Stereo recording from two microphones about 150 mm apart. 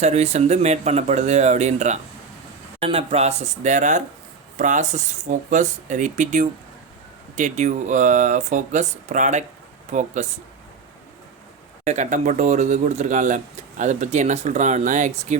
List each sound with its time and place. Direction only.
0.0 s speech: 50° right (ahead or behind)
11.9 s speech: 55° right (ahead or behind)